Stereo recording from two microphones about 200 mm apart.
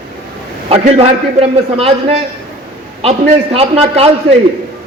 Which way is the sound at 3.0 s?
30° right (ahead or behind).